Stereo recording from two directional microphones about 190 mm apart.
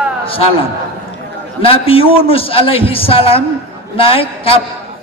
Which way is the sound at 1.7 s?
30° left (ahead or behind).